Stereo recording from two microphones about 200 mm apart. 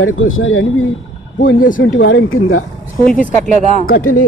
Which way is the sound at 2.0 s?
75° left (ahead or behind).